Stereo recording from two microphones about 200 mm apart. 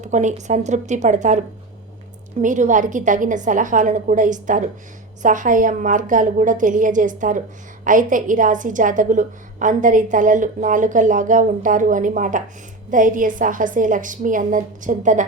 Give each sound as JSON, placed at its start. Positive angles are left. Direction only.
{"t": 0.0, "sound": "a woman's voice", "side_deg": -35}